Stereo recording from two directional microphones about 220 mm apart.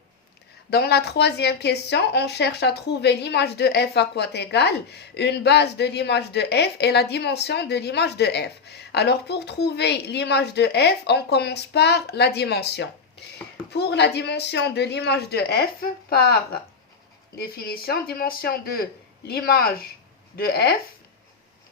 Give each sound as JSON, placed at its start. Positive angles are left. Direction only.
{"t": 0.7, "sound": "speech", "side_deg": 45}